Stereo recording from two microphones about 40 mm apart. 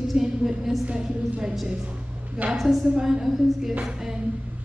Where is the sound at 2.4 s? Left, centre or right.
Right.